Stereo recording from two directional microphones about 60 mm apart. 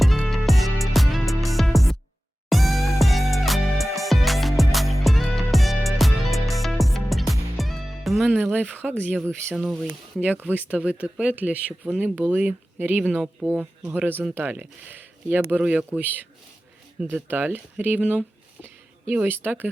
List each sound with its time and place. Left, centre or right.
0.0 s music: centre
8.4 s speech: right
9.6 s speech: centre
9.8 s speech: right
14.9 s speech: right
15.6 s speech: centre
15.9 s speech: right
17.2 s speech: right